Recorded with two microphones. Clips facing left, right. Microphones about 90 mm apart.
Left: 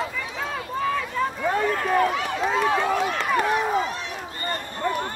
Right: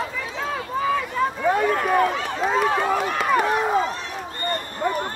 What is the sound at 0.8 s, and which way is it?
Run, 5° right (ahead or behind).